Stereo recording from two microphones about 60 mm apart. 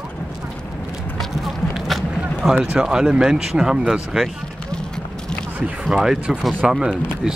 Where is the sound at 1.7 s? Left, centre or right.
Centre.